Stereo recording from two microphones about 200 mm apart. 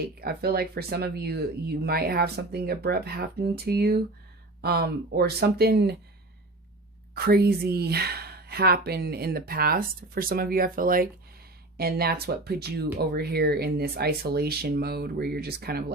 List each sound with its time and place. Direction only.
0.2 s speech: 50° right (ahead or behind)
7.1 s speech: 50° right (ahead or behind)